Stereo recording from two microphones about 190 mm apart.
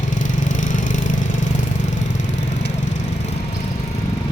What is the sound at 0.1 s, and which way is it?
Vehicle, 45° left (ahead or behind).